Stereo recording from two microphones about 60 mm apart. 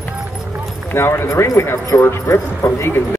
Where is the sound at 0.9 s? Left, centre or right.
Left.